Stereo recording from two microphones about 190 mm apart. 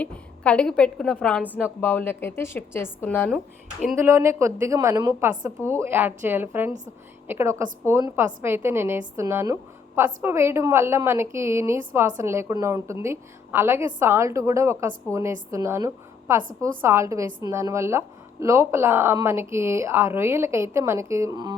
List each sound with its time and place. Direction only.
0.0 s a woman's voice: 5° left (ahead or behind)
3.9 s a woman's voice: 15° right (ahead or behind)